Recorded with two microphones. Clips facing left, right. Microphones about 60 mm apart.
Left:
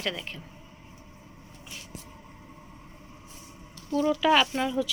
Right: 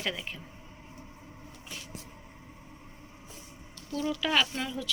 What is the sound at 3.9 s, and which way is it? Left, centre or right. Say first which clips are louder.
Speech: left 7 dB; centre.